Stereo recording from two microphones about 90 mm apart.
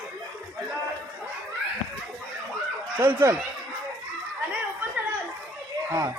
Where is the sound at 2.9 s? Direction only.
30° right (ahead or behind).